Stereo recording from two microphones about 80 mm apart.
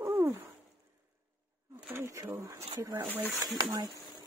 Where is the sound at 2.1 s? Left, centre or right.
Right.